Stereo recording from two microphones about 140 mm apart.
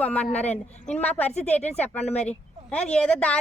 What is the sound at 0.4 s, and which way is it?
Speech, 55° left (ahead or behind).